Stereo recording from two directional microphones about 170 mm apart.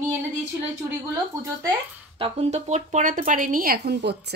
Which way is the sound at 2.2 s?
40° right (ahead or behind).